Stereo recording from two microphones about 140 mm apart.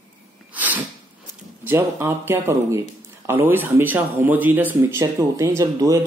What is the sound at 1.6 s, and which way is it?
Speech, 15° right (ahead or behind).